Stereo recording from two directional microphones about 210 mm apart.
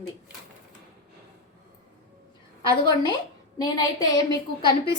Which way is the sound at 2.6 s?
20° left (ahead or behind).